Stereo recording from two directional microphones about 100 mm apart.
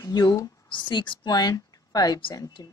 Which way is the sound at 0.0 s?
35° left (ahead or behind).